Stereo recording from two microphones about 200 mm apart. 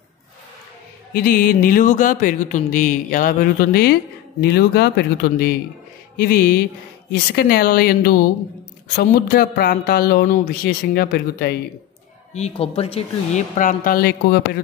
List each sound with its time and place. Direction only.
1.1 s speech: 50° left (ahead or behind)
12.4 s speech: 30° left (ahead or behind); by 14.6 s 50° left (ahead or behind)